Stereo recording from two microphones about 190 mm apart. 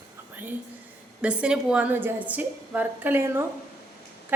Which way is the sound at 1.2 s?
5° right (ahead or behind).